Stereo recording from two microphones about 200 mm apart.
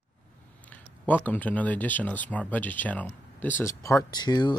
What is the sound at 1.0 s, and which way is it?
Speech, 10° left (ahead or behind).